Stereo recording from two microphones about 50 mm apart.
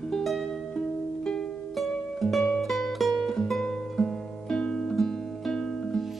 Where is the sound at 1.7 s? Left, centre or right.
Centre.